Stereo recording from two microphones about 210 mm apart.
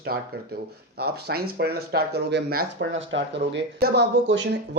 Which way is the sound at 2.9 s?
60° right (ahead or behind).